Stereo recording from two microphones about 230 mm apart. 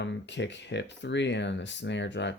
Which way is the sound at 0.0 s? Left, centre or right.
Left.